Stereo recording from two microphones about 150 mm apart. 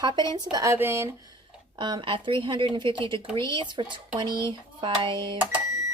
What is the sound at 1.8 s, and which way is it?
Speech, 30° right (ahead or behind).